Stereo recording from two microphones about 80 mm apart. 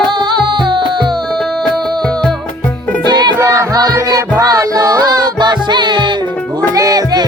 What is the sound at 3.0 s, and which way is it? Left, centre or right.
Music, right.